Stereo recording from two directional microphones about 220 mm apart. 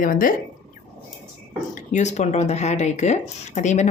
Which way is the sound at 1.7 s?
35° left (ahead or behind).